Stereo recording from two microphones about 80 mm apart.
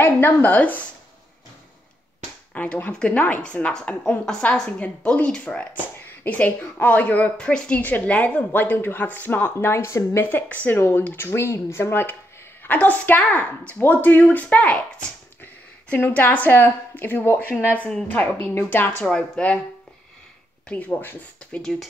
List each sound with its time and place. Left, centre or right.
0.0 s a woman's voice: left
2.5 s a woman's voice: centre; by 10.2 s left
10.2 s a woman's voice: left
18.6 s a woman's voice: left
19.0 s a woman's voice: centre
20.6 s a woman's voice: centre
21.5 s speech: centre